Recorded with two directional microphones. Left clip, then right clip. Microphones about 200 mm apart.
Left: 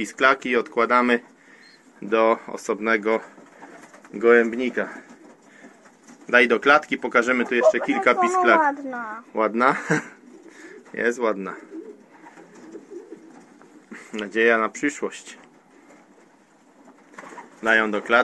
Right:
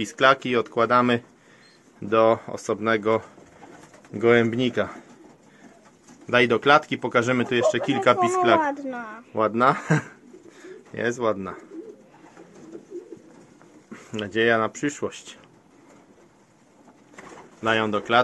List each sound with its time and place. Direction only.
0.0 s speech: 10° right (ahead or behind)
4.1 s speech: 20° right (ahead or behind)
6.2 s speech: 5° right (ahead or behind)
13.9 s speech: centre (ahead or behind)
17.6 s speech: centre (ahead or behind)